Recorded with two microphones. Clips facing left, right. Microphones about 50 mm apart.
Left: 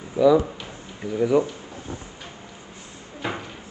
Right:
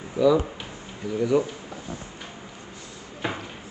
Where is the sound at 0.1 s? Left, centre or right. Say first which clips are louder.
Left 3 dB; centre.